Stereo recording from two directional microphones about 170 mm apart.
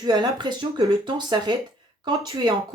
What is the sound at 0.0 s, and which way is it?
Speech, 25° right (ahead or behind).